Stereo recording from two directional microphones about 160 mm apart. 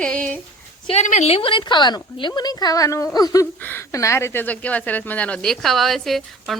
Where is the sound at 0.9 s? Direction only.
45° left (ahead or behind).